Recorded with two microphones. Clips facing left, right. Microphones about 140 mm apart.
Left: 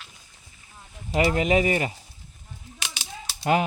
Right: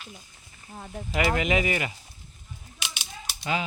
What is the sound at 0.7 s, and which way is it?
Speech, 55° right (ahead or behind).